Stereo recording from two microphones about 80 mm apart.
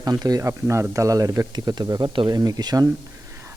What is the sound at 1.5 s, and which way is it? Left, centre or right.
Speech, right.